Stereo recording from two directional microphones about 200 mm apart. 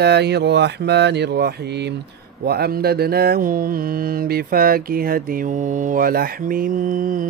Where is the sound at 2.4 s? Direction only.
50° right (ahead or behind).